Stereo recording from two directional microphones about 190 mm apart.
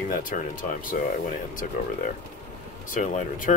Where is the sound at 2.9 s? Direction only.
40° left (ahead or behind).